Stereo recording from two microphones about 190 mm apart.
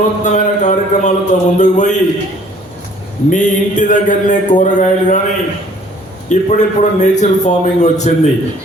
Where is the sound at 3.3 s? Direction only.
40° left (ahead or behind).